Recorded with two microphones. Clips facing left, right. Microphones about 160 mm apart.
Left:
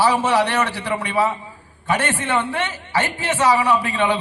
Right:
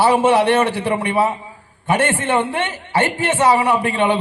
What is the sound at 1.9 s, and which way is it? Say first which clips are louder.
Speech: right 5 dB; 50° right (ahead or behind).